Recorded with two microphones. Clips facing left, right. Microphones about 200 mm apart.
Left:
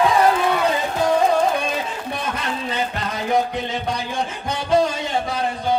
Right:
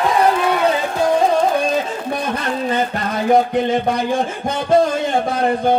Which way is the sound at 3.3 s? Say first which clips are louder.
Right 7 dB; 55° right (ahead or behind).